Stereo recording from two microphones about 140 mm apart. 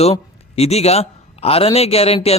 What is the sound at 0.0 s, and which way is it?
A man's voice, 45° left (ahead or behind).